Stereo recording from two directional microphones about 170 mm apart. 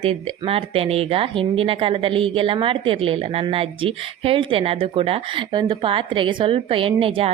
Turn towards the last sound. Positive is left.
turn(degrees=-30)  # may be behind; listen again after turning